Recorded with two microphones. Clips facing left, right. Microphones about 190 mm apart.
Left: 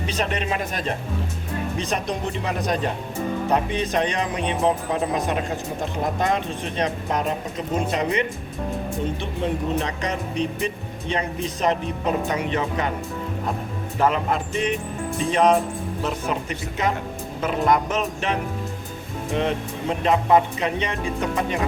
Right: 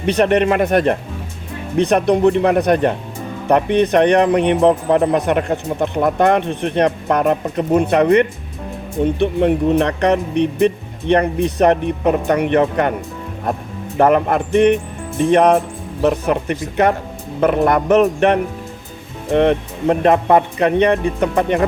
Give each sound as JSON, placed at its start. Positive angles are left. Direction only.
{"t": 0.0, "sound": "speech", "side_deg": -65}
{"t": 14.0, "sound": "speech", "side_deg": -60}